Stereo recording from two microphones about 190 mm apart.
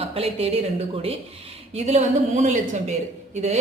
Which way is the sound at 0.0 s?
30° right (ahead or behind).